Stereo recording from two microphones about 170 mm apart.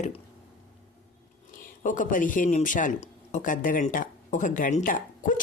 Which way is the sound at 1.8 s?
50° left (ahead or behind).